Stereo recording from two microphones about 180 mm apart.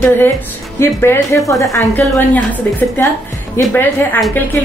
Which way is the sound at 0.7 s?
15° left (ahead or behind).